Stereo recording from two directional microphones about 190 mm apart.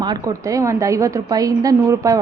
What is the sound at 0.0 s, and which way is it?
A woman's voice, 20° right (ahead or behind).